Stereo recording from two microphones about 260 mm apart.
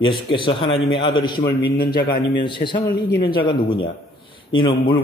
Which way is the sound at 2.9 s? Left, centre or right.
Left.